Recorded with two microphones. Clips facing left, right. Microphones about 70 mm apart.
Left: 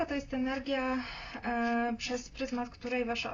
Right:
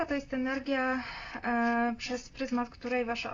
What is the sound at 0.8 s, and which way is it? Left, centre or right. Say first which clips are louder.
Speech: right 2 dB; right.